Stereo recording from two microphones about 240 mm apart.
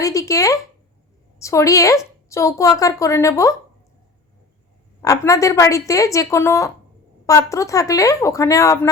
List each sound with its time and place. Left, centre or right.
0.0 s a woman's voice: centre
5.0 s a woman's voice: centre